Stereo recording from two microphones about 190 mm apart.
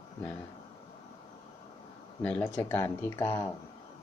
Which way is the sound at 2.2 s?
5° left (ahead or behind).